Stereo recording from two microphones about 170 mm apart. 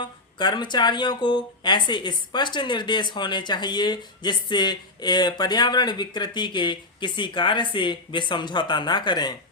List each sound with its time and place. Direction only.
0.0 s speech: 25° left (ahead or behind)